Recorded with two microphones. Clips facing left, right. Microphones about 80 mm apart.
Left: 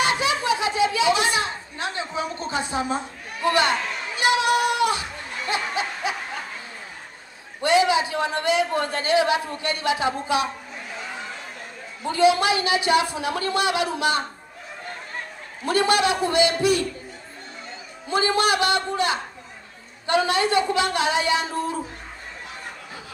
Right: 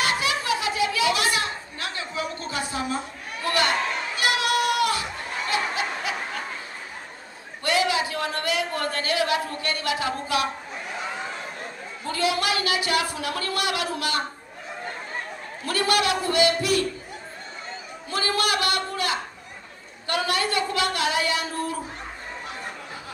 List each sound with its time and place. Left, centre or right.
0.0 s chatter: left
4.2 s a sound: left
5.5 s snicker: left
7.6 s a sound: left
12.0 s speech: left
15.6 s a man's voice: left
18.1 s a man's voice: left